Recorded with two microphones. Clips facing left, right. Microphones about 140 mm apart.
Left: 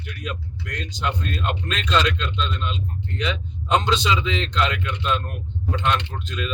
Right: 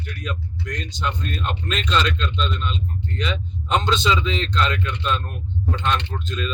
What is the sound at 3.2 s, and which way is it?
Speech, 15° left (ahead or behind).